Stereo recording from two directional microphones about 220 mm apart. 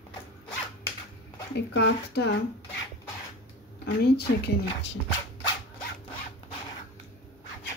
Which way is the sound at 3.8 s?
50° left (ahead or behind).